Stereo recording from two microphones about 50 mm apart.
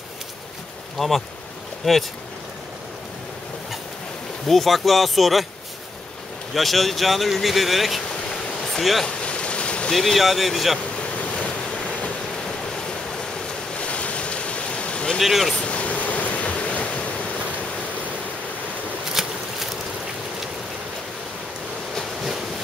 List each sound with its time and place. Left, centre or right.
0.9 s speech: centre
4.5 s speech: centre
6.5 s speech: centre
9.0 s a sound: left
9.9 s speech: centre
11.0 s waves: left
13.7 s ocean: left
15.1 s speech: centre
15.5 s waves: left
19.2 s a sound: centre